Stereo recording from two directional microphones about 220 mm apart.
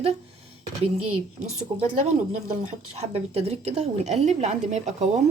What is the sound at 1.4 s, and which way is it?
Speech, 30° right (ahead or behind).